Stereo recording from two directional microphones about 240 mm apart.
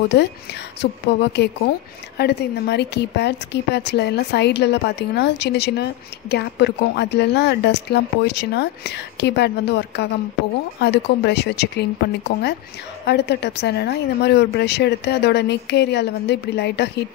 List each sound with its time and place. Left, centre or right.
0.1 s a woman's voice: left
13.0 s a woman's voice: left